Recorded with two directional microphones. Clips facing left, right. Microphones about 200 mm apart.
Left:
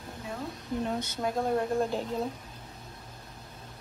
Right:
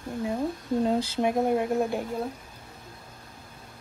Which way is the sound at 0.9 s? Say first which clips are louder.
Right 7 dB; 30° right (ahead or behind).